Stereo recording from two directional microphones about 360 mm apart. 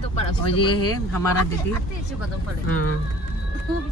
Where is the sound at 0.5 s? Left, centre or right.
Centre.